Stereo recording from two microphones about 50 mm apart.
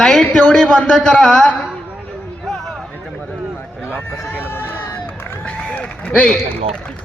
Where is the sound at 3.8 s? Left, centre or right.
Left.